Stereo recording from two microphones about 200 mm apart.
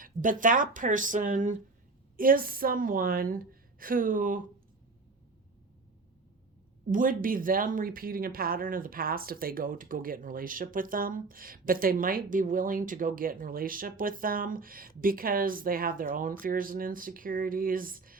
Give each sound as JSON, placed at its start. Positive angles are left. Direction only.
{"t": 0.0, "sound": "speech", "side_deg": -40}
{"t": 6.9, "sound": "speech", "side_deg": -45}